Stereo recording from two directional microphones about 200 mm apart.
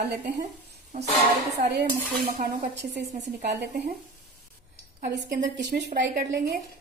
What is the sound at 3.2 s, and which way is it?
Dishes, 55° right (ahead or behind).